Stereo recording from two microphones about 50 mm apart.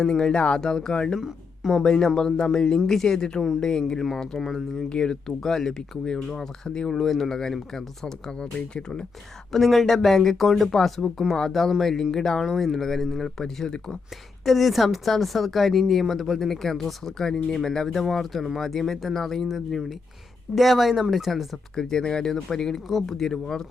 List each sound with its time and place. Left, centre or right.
0.0 s speech: centre
9.5 s a woman's voice: centre
13.4 s speech: centre
14.4 s a woman's voice: centre
21.8 s speech: centre